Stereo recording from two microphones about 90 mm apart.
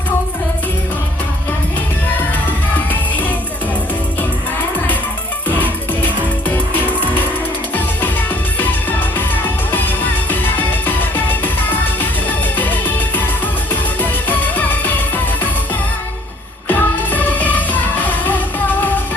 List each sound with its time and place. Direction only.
2.1 s music: 20° left (ahead or behind)
5.5 s music: 20° left (ahead or behind)
8.5 s music: 20° left (ahead or behind)
16.6 s music: 20° left (ahead or behind)